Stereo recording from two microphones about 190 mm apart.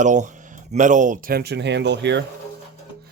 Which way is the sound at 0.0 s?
40° right (ahead or behind).